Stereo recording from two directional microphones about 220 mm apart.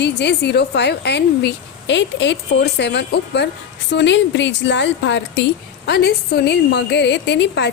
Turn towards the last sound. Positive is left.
turn(degrees=50)  # may be behind; listen again after turning